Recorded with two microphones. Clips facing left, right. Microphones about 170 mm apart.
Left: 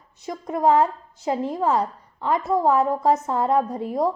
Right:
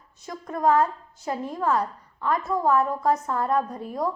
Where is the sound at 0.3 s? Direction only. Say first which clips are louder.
Left 3 dB; 20° left (ahead or behind).